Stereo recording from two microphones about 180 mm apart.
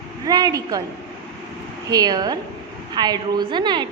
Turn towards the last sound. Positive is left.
turn(degrees=-25)  # may be behind; listen again after turning